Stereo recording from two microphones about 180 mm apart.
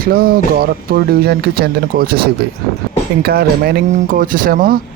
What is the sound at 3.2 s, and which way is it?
Speech, 60° right (ahead or behind).